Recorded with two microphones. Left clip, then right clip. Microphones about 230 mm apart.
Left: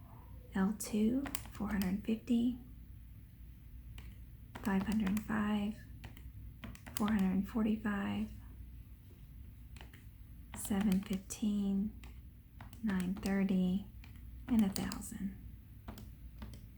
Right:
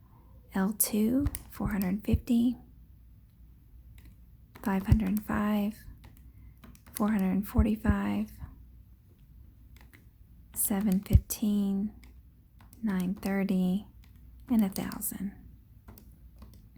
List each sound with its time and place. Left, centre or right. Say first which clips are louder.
0.5 s speech: right 6 dB; right
4.6 s speech: right 5 dB; right
6.6 s a sound: right 6 dB; centre
7.1 s speech: right 5 dB; right
10.5 s speech: right 5 dB; right
12.8 s speech: right 5 dB; right